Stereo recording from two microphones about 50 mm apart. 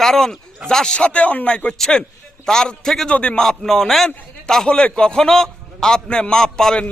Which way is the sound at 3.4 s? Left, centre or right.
Centre.